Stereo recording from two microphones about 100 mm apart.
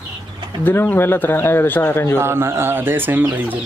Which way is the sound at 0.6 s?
20° left (ahead or behind).